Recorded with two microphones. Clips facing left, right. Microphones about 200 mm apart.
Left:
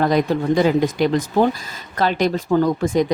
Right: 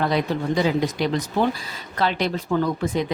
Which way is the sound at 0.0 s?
45° left (ahead or behind).